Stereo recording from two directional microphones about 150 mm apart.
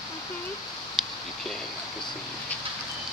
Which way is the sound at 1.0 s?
Centre (ahead or behind).